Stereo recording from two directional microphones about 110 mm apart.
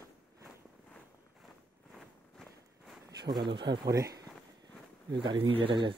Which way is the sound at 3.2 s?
40° right (ahead or behind).